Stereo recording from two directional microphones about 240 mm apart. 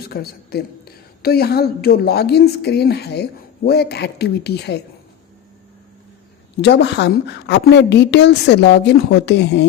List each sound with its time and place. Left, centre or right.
0.1 s a woman's voice: left
6.6 s a woman's voice: left